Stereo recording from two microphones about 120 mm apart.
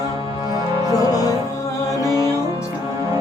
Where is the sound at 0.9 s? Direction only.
30° left (ahead or behind).